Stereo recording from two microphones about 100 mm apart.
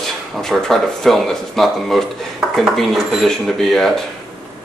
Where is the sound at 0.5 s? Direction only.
5° left (ahead or behind).